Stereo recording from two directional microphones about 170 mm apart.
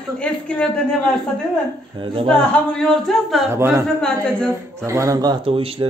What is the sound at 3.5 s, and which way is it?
Speech, 15° right (ahead or behind).